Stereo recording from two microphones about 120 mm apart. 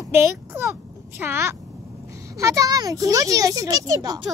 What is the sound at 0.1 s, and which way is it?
A child's voice, 20° right (ahead or behind).